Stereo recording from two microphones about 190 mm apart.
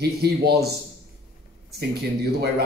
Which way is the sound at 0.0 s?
55° right (ahead or behind).